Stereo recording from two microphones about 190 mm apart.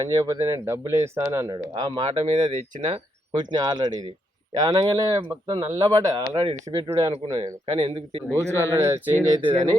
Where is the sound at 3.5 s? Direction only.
20° right (ahead or behind).